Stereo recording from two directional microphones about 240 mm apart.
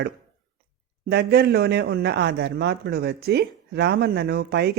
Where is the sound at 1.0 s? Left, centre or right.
Right.